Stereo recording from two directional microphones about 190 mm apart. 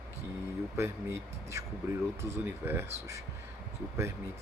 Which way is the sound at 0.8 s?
15° right (ahead or behind).